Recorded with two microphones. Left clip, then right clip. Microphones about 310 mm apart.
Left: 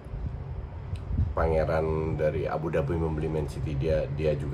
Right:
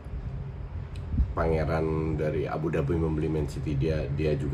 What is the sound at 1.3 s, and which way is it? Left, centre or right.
Speech, centre.